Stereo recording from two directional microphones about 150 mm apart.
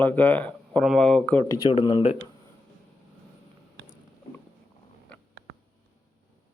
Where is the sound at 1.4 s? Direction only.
25° left (ahead or behind).